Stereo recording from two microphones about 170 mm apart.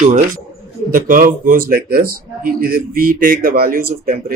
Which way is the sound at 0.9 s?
55° right (ahead or behind).